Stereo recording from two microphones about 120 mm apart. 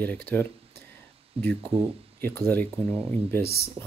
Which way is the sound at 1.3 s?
55° right (ahead or behind).